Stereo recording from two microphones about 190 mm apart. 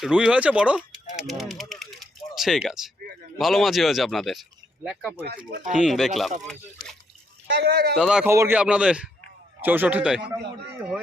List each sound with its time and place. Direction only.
0.0 s speech: 5° right (ahead or behind)
7.4 s speech: 60° right (ahead or behind)
7.9 s a man's voice: 5° right (ahead or behind)